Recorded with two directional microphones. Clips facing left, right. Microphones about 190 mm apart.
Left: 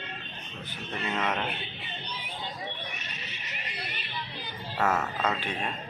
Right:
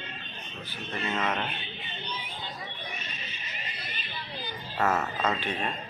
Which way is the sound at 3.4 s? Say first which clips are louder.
Left 4 dB; 70° left (ahead or behind).